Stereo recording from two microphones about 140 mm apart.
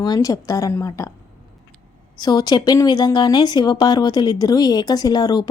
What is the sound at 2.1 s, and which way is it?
A woman's voice, 30° left (ahead or behind).